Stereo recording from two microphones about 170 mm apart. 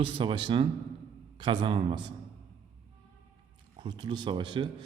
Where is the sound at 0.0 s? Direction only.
30° right (ahead or behind).